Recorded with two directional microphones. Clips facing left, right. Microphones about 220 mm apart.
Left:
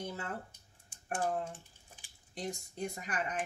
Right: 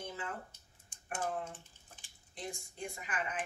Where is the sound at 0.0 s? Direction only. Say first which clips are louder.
Left 3 dB; 40° left (ahead or behind).